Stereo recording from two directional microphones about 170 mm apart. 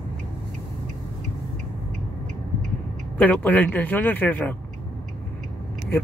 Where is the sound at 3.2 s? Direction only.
10° left (ahead or behind).